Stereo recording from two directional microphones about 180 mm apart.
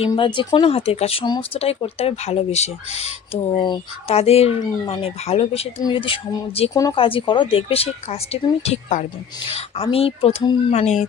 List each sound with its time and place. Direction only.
0.0 s a woman's voice: 25° left (ahead or behind)